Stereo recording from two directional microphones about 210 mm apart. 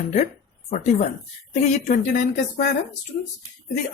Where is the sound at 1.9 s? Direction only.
35° left (ahead or behind).